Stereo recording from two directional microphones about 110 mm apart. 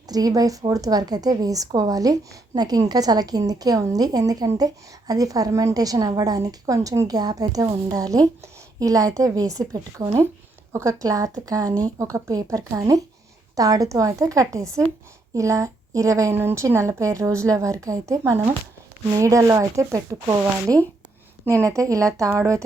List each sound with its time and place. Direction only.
0.1 s a woman's voice: 35° right (ahead or behind)